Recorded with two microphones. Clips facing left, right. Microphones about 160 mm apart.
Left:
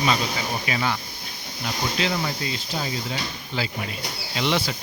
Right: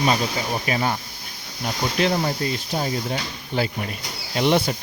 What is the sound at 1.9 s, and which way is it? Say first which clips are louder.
Speech: right 7 dB; 50° right (ahead or behind).